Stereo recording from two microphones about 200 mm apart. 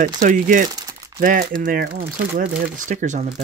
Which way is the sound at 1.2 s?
45° right (ahead or behind).